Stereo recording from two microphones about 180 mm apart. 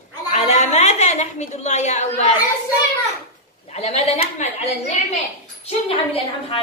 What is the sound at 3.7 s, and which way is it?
A woman's voice, 35° left (ahead or behind).